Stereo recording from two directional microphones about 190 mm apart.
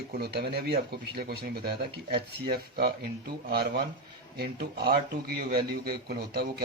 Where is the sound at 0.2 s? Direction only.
55° right (ahead or behind).